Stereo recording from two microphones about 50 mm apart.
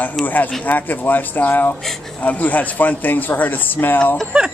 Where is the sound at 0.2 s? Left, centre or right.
Left.